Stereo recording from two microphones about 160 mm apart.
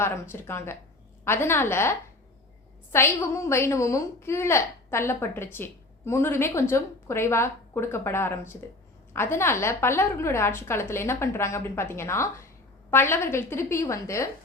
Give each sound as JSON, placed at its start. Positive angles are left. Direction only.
{"t": 0.0, "sound": "a woman's voice", "side_deg": 15}